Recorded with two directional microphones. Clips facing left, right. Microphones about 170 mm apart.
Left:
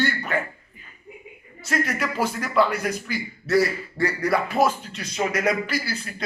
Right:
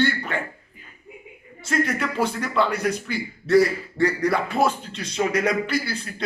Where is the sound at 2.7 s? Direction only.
30° right (ahead or behind).